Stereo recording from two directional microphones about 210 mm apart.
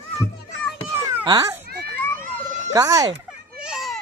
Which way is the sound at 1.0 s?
15° right (ahead or behind).